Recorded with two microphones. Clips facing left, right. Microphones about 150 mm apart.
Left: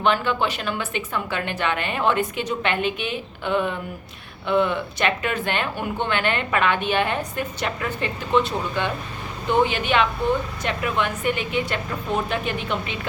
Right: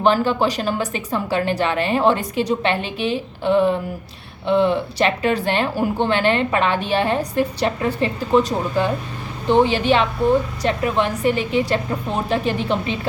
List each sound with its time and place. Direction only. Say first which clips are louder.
0.0 s speech: right 5 dB; 35° right (ahead or behind)